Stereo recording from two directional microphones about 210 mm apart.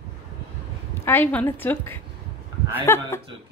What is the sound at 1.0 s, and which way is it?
A woman's voice, 10° left (ahead or behind).